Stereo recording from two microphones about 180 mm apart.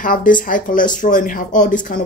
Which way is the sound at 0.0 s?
50° left (ahead or behind).